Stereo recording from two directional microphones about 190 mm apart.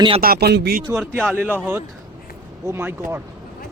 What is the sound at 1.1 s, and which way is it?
Speech, 10° right (ahead or behind).